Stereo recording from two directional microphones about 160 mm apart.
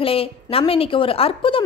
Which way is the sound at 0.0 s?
35° left (ahead or behind).